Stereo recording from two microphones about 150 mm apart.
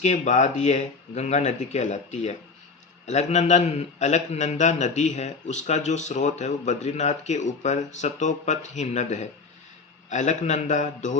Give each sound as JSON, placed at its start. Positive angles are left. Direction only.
{"t": 0.0, "sound": "a man's voice", "side_deg": 50}